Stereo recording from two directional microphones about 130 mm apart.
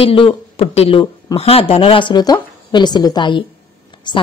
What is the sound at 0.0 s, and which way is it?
A woman's voice, 45° left (ahead or behind).